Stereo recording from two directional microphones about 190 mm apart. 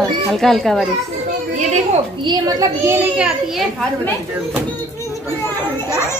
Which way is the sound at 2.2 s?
20° right (ahead or behind).